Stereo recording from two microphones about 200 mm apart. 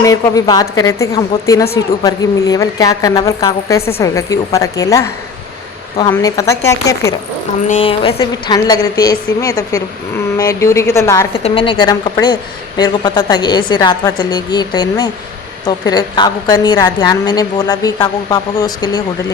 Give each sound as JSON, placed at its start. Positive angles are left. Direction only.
{"t": 0.0, "sound": "a woman's voice", "side_deg": 15}
{"t": 7.7, "sound": "a woman's voice", "side_deg": 30}
{"t": 8.2, "sound": "a woman's voice", "side_deg": 20}
{"t": 11.4, "sound": "a woman's voice", "side_deg": 25}